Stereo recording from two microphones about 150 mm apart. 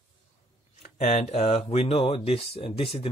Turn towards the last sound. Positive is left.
turn(degrees=45)  # may be behind; listen again after turning